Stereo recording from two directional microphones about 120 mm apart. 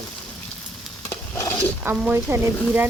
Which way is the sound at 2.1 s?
15° right (ahead or behind).